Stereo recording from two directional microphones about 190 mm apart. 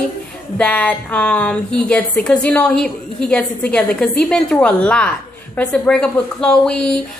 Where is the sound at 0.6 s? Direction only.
5° left (ahead or behind).